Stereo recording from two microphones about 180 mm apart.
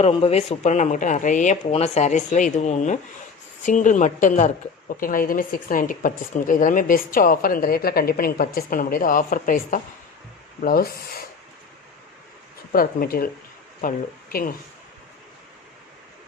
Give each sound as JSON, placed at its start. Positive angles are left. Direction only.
{"t": 0.0, "sound": "a woman's voice", "side_deg": 35}
{"t": 12.7, "sound": "a woman's voice", "side_deg": 55}